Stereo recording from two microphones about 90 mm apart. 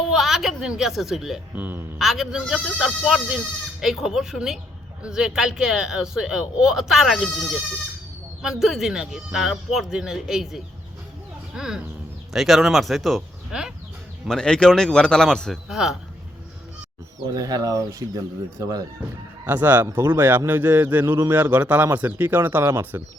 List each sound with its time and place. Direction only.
0.1 s a woman's voice: 5° right (ahead or behind)
1.5 s a man's voice: 20° right (ahead or behind)
2.0 s speech: 5° right (ahead or behind)
14.3 s speech: 10° left (ahead or behind)
15.7 s speech: 5° right (ahead or behind)
17.2 s speech: 45° right (ahead or behind)
19.5 s a man's voice: 20° right (ahead or behind)